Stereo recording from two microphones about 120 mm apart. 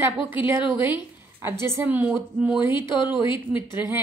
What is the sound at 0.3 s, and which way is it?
A woman's voice, 15° right (ahead or behind).